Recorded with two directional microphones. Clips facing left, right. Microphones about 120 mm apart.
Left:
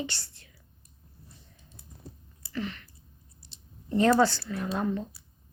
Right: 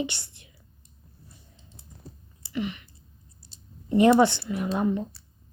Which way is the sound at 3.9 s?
15° right (ahead or behind).